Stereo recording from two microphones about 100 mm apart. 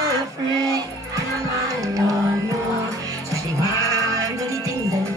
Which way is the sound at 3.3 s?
35° right (ahead or behind).